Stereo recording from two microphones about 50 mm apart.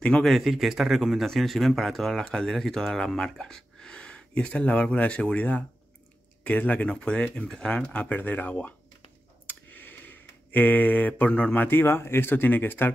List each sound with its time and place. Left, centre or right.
0.2 s speech: centre
7.9 s speech: left
9.5 s a sound: left
11.8 s speech: left